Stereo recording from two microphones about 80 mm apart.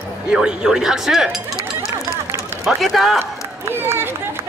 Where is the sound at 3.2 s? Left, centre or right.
Right.